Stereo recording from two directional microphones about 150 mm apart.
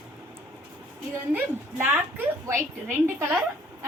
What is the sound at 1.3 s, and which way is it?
A woman's voice, 10° right (ahead or behind).